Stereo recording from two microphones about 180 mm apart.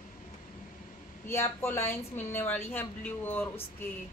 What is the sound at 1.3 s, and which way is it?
Speech, 15° left (ahead or behind).